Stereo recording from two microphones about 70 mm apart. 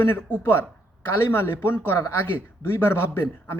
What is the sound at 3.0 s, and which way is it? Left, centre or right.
Speech, left.